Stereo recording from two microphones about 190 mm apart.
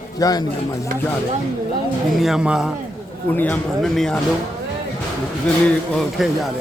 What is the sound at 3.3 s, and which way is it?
Speech, 10° left (ahead or behind).